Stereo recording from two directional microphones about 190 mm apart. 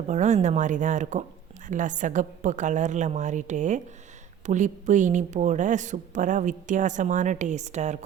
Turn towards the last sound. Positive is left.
turn(degrees=-35)  # may be behind; listen again after turning